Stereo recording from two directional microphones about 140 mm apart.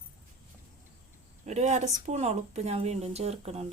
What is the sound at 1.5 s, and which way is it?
Speech, 55° right (ahead or behind).